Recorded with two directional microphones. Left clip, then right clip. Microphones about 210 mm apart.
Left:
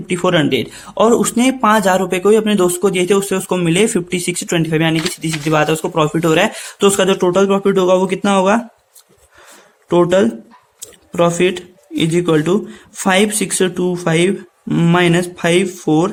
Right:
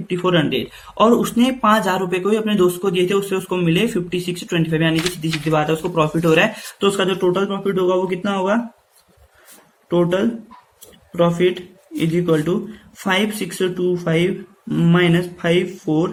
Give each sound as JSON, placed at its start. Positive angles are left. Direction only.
{"t": 0.1, "sound": "speech", "side_deg": 45}
{"t": 9.9, "sound": "speech", "side_deg": 55}